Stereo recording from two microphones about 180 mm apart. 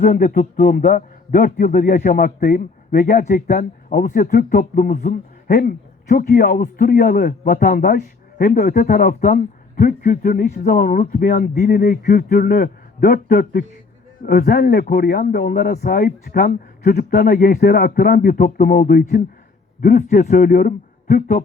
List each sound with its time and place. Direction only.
0.0 s a man's voice: 50° left (ahead or behind)